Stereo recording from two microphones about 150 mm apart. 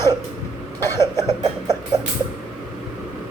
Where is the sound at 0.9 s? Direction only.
20° left (ahead or behind).